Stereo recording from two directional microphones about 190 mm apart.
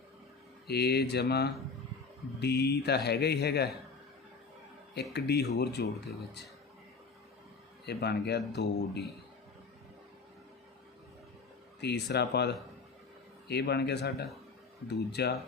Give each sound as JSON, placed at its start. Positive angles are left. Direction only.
{"t": 0.7, "sound": "speech", "side_deg": 60}
{"t": 5.1, "sound": "speech", "side_deg": 60}
{"t": 7.9, "sound": "speech", "side_deg": 60}
{"t": 11.8, "sound": "speech", "side_deg": 60}